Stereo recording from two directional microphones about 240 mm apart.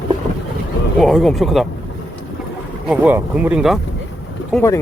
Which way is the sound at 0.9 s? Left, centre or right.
Centre.